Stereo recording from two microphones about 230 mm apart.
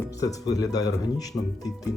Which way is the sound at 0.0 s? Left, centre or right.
Centre.